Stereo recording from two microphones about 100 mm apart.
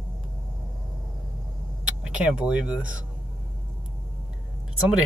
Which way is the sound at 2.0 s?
10° right (ahead or behind).